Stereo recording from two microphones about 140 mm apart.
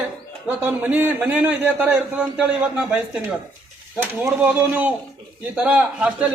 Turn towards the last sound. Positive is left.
turn(degrees=-5)  # may be behind; listen again after turning